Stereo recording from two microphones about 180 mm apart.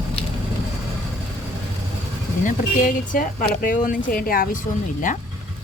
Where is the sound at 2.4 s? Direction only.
45° left (ahead or behind).